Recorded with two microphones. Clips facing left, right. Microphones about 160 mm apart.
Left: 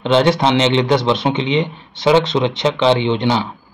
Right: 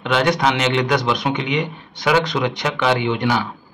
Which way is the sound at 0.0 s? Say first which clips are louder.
Left 4 dB; 25° left (ahead or behind).